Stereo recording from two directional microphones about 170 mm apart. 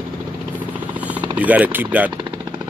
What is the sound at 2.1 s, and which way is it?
Jackhammer, 30° right (ahead or behind).